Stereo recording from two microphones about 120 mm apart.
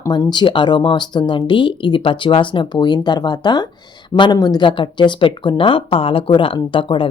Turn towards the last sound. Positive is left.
turn(degrees=45)  # may be behind; listen again after turning